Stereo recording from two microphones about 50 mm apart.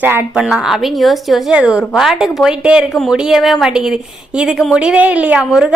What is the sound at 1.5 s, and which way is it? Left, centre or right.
Speech, centre.